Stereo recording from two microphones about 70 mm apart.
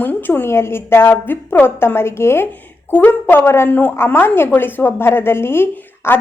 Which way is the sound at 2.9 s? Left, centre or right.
Left.